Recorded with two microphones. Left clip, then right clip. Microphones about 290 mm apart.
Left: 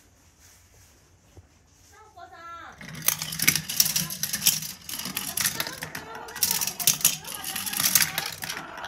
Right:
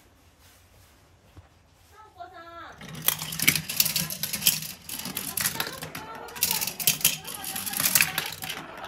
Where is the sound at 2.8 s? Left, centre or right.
Centre.